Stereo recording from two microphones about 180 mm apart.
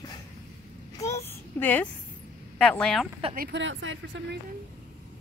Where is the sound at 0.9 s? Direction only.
15° left (ahead or behind).